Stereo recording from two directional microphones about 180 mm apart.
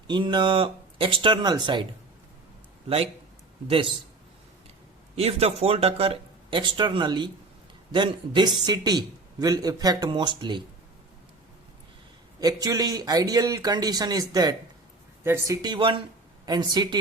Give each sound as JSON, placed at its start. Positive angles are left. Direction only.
{"t": 0.1, "sound": "a man's voice", "side_deg": -25}
{"t": 3.7, "sound": "a man's voice", "side_deg": -30}
{"t": 5.1, "sound": "a man's voice", "side_deg": -35}
{"t": 12.4, "sound": "a man's voice", "side_deg": -20}